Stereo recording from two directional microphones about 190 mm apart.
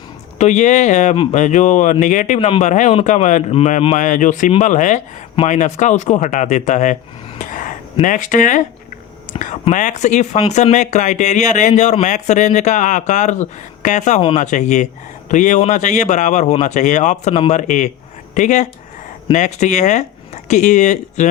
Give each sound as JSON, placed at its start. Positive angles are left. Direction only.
{"t": 0.3, "sound": "speech", "side_deg": 40}
{"t": 7.3, "sound": "a sound", "side_deg": 45}
{"t": 8.0, "sound": "speech", "side_deg": 40}